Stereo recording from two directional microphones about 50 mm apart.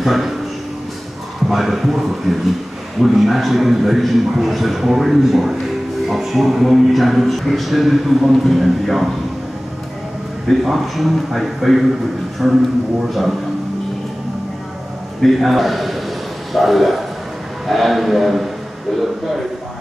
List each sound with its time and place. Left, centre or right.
0.0 s speech: centre
1.5 s speech: centre
10.5 s speech: centre
15.2 s speech: centre